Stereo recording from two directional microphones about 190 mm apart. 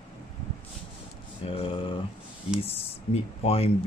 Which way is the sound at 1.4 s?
30° left (ahead or behind).